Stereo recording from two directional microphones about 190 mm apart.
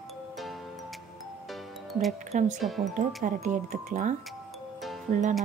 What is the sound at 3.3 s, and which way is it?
Speech, 40° right (ahead or behind).